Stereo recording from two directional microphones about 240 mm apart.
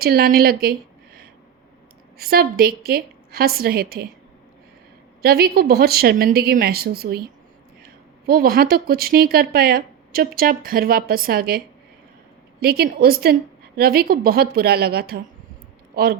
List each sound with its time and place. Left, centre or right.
0.0 s a woman's voice: right
5.2 s speech: right
8.3 s speech: right